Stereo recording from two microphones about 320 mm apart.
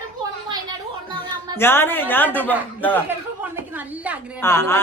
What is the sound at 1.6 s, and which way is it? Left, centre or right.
Speech, centre.